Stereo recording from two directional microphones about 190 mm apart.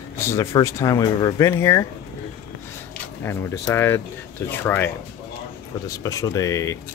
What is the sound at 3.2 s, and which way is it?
Speech, 15° left (ahead or behind).